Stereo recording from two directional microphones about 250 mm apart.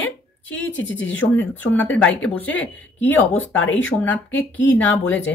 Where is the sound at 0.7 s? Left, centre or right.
Left.